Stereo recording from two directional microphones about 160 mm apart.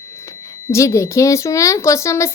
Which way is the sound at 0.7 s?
20° left (ahead or behind).